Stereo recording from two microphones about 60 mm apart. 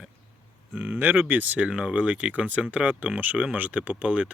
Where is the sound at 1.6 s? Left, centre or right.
Centre.